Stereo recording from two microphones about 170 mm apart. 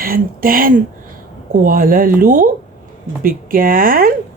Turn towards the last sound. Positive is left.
turn(degrees=-60)  # may be behind; listen again after turning